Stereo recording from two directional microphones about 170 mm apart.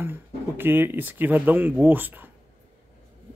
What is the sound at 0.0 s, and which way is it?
Speech, 10° right (ahead or behind).